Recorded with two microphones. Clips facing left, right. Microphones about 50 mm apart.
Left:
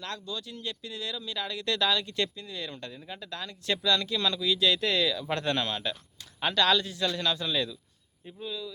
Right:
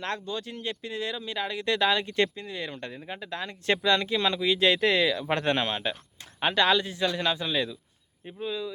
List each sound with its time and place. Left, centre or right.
0.0 s speech: right; by 7.8 s centre
8.4 s speech: right